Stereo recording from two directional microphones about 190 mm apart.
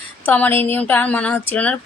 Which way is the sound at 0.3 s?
10° left (ahead or behind).